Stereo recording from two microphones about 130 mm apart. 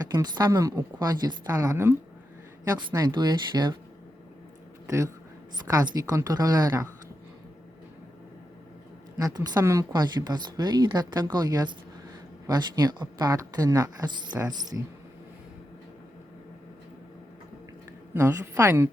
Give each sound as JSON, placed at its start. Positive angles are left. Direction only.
{"t": 0.1, "sound": "speech", "side_deg": -30}
{"t": 2.6, "sound": "a woman's voice", "side_deg": -30}
{"t": 4.9, "sound": "speech", "side_deg": -25}
{"t": 9.1, "sound": "a woman's voice", "side_deg": -30}
{"t": 18.1, "sound": "speech", "side_deg": -25}